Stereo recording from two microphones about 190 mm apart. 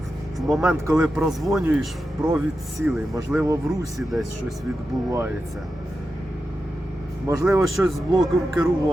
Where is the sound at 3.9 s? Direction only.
Centre (ahead or behind).